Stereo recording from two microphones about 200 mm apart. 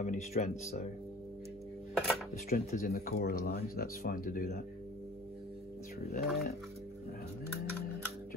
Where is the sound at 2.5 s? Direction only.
45° left (ahead or behind).